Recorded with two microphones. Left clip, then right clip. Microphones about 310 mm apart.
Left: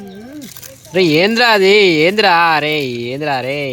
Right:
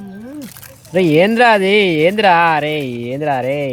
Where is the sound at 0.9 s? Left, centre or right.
Centre.